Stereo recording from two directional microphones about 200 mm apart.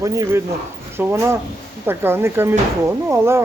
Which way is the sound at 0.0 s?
15° right (ahead or behind).